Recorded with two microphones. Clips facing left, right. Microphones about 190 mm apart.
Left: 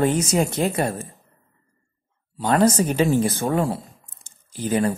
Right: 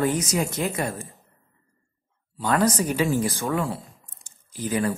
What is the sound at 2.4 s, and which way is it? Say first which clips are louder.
Speech: left 4 dB; 25° left (ahead or behind).